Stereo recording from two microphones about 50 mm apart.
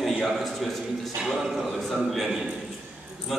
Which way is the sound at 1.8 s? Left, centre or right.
Centre.